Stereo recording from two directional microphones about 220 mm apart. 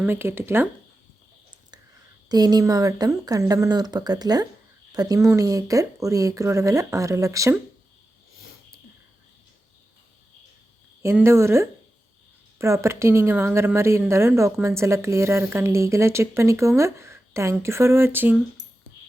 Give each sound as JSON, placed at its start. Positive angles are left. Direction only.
{"t": 0.0, "sound": "a woman's voice", "side_deg": -10}
{"t": 2.3, "sound": "a woman's voice", "side_deg": -15}
{"t": 11.0, "sound": "a woman's voice", "side_deg": -10}